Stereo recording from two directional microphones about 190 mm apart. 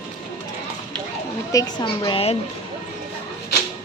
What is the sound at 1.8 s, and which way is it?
Speech, 30° left (ahead or behind).